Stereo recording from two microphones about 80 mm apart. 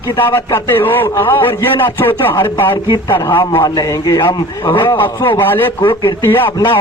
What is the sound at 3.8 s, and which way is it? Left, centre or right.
A man's voice, left.